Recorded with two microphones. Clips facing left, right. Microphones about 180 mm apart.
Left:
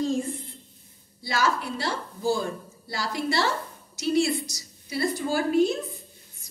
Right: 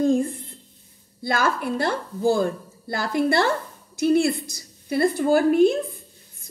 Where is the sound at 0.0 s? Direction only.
55° right (ahead or behind).